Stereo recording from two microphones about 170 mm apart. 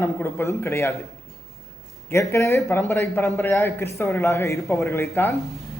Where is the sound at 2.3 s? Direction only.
15° left (ahead or behind).